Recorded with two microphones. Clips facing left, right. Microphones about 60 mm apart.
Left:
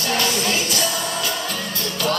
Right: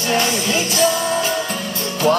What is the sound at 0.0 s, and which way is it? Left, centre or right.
Music, right.